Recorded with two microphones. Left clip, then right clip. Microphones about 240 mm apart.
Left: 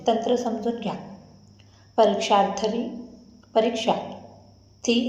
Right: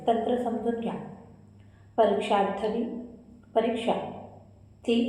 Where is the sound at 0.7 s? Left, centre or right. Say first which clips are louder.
Left 1 dB; left.